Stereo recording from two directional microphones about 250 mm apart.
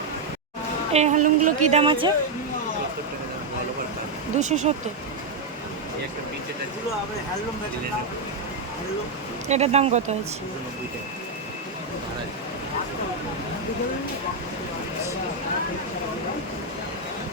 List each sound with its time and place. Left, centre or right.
0.9 s a woman's voice: right
4.4 s a woman's voice: right
9.5 s a woman's voice: right